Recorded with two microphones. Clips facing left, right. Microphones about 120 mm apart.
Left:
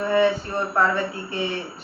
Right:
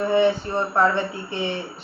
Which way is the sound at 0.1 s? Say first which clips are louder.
Even; 25° right (ahead or behind).